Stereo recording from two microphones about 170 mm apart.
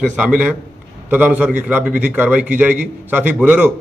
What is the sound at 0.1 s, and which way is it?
A man's voice, 10° right (ahead or behind).